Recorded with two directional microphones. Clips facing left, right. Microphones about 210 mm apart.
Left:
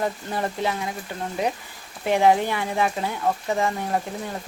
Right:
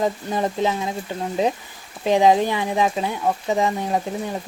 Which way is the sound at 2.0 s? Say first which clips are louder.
Right 3 dB; 15° right (ahead or behind).